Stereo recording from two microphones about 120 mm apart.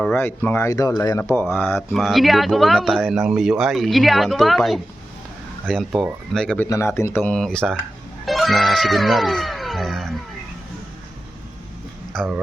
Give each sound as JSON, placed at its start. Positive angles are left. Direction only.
{"t": 0.0, "sound": "speech", "side_deg": 15}
{"t": 1.5, "sound": "speech", "side_deg": 15}
{"t": 1.9, "sound": "speech", "side_deg": 0}
{"t": 6.6, "sound": "speech", "side_deg": 20}